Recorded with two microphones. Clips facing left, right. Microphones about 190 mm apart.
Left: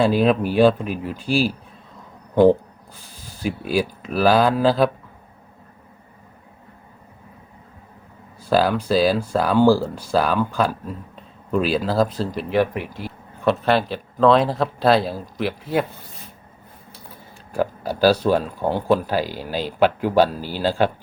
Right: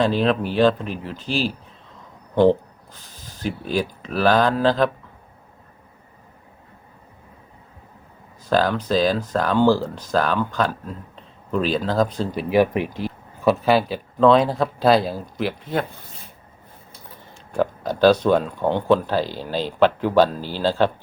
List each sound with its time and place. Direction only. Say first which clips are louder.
0.0 s speech: left 2 dB; 10° left (ahead or behind)
2.3 s a sound: left 2 dB; 10° left (ahead or behind)
3.4 s speech: left 2 dB; 10° left (ahead or behind)
8.4 s speech: left 1 dB; 5° left (ahead or behind)
12.5 s speech: right 3 dB; 20° right (ahead or behind)
13.4 s speech: right 1 dB; centre (ahead or behind)
17.5 s speech: right 1 dB; 5° left (ahead or behind)